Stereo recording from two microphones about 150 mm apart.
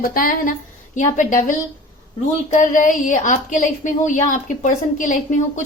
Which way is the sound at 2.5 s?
60° left (ahead or behind).